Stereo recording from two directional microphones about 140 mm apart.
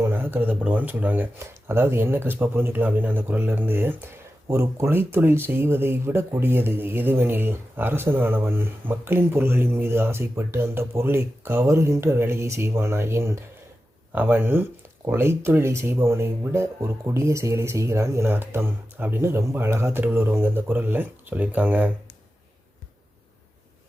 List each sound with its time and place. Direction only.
0.0 s speech: 15° right (ahead or behind)